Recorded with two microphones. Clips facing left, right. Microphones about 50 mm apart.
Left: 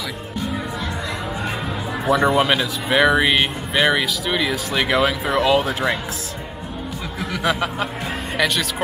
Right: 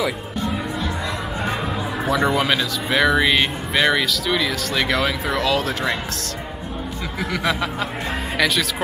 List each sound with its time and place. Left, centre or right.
2.0 s speech: centre
7.2 s speech: centre